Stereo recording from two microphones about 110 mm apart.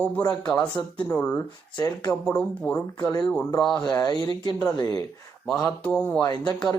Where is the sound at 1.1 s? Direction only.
15° left (ahead or behind).